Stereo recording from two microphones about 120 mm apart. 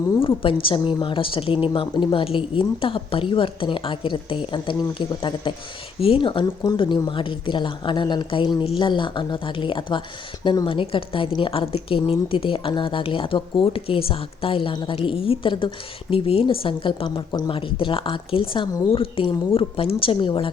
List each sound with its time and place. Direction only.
0.2 s a woman's voice: 45° left (ahead or behind)
10.7 s a woman's voice: 45° left (ahead or behind)